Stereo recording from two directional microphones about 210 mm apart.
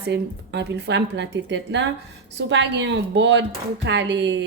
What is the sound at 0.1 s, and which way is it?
A woman's voice, 55° right (ahead or behind).